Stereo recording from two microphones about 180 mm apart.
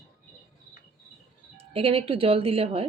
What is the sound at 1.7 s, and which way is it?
A woman's voice, 30° right (ahead or behind).